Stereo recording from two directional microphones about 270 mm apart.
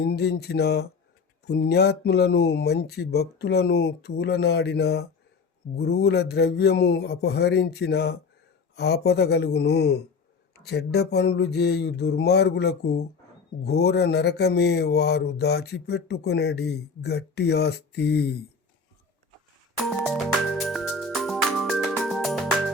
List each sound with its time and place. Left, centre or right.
0.0 s speech: left
19.9 s music: centre